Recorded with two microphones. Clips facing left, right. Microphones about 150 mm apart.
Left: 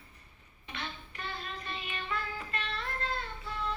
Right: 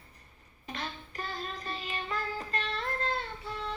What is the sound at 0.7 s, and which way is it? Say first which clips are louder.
Child singing: right 3 dB; 40° right (ahead or behind).